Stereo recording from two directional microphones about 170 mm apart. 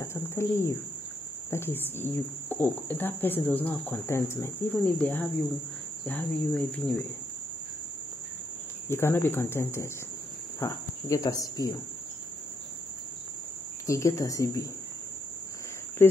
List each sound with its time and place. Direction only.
0.0 s cricket: 15° left (ahead or behind)
1.5 s speech: 15° left (ahead or behind)
8.8 s speech: 15° left (ahead or behind)
13.8 s speech: 20° left (ahead or behind)
16.0 s speech: 15° left (ahead or behind)